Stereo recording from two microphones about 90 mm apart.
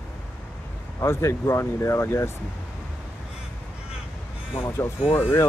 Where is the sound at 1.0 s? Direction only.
30° left (ahead or behind).